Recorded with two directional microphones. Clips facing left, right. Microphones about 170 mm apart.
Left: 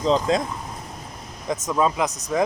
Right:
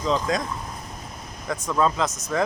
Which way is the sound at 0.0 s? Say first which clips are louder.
Left 4 dB; 30° left (ahead or behind).